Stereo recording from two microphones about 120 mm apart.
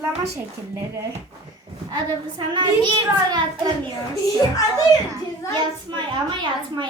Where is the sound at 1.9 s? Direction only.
40° right (ahead or behind).